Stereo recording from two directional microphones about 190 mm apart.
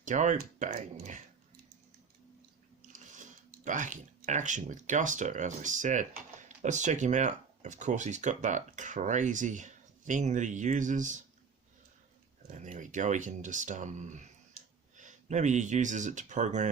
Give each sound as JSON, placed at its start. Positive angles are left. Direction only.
{"t": 0.0, "sound": "speech", "side_deg": -40}
{"t": 2.9, "sound": "speech", "side_deg": -40}
{"t": 12.5, "sound": "speech", "side_deg": -40}